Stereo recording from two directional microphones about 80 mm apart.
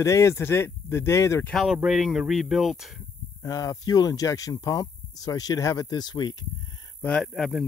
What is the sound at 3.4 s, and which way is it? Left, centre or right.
Speech, left.